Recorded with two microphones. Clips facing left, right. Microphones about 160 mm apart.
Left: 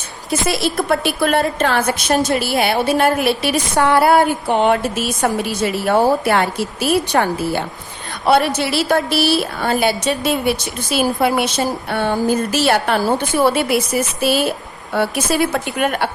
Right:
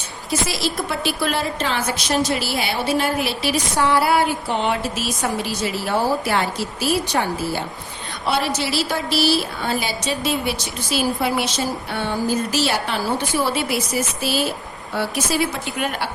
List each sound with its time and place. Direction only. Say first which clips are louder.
0.3 s a woman's voice: left 4 dB; 55° left (ahead or behind)